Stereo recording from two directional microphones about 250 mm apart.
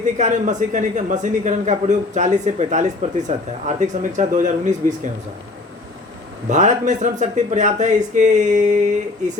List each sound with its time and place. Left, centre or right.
0.0 s speech: right
6.5 s speech: right